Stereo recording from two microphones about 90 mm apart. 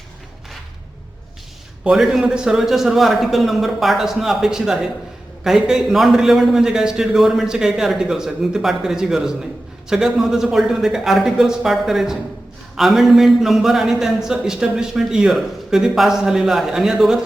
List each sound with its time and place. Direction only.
1.8 s a man's voice: 5° right (ahead or behind)